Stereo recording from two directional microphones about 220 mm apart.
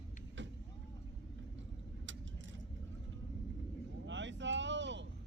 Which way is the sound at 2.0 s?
55° right (ahead or behind).